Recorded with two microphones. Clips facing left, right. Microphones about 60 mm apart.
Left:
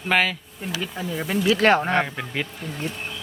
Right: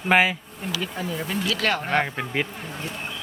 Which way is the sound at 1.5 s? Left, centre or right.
Left.